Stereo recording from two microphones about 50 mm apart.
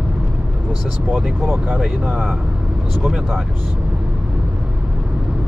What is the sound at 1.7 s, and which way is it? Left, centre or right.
Speech, centre.